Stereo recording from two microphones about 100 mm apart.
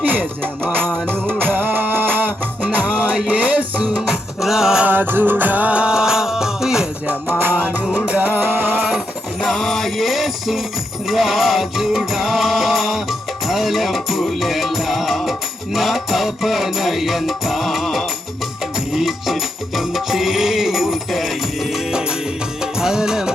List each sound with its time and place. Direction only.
0.0 s music: 15° right (ahead or behind)
4.9 s music: 20° right (ahead or behind)
7.3 s music: 15° right (ahead or behind)
9.4 s music: centre (ahead or behind)